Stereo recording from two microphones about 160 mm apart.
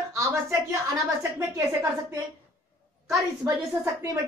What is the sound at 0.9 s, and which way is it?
Speech, 20° right (ahead or behind).